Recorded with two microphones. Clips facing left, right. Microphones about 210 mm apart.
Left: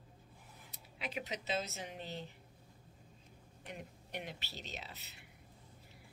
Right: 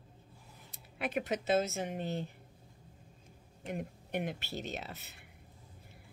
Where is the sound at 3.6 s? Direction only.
50° right (ahead or behind).